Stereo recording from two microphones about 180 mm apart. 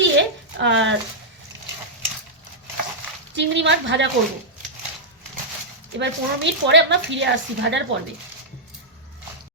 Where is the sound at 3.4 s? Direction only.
85° right.